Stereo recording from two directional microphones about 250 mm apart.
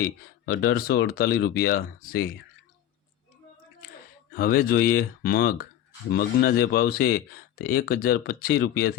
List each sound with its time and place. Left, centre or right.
0.4 s speech: left
4.3 s speech: left